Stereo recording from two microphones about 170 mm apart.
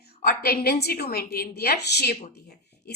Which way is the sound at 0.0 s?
65° left (ahead or behind).